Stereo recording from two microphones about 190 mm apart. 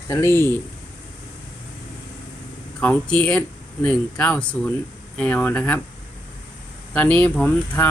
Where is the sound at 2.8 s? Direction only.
5° left (ahead or behind).